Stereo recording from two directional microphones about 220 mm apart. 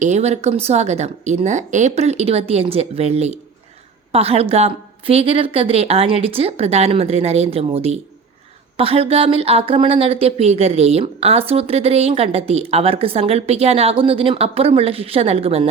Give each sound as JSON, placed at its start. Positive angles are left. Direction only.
{"t": 0.0, "sound": "speech", "side_deg": -30}